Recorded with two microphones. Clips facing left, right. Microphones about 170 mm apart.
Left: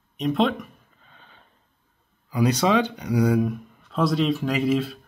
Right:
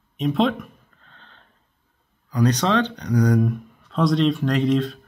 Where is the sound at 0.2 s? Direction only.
Centre (ahead or behind).